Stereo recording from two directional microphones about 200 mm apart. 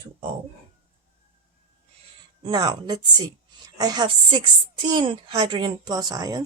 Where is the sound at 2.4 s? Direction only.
20° right (ahead or behind).